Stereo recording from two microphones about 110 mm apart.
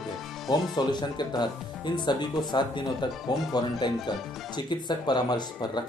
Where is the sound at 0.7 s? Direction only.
40° left (ahead or behind).